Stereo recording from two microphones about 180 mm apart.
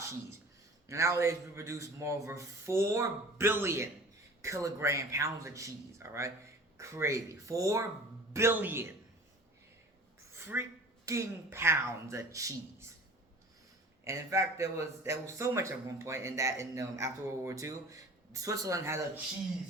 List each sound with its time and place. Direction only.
0.9 s a man's voice: 15° right (ahead or behind)
10.3 s speech: 15° right (ahead or behind)
14.0 s a man's voice: 15° right (ahead or behind)